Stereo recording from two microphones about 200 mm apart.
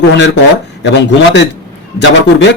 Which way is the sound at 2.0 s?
60° left (ahead or behind).